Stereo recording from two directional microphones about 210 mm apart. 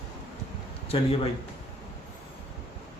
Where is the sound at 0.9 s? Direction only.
25° left (ahead or behind).